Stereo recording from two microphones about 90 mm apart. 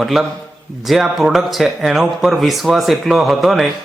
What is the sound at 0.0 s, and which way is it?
Speech, centre (ahead or behind).